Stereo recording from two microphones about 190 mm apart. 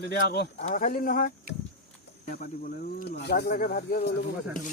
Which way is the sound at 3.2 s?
60° left (ahead or behind).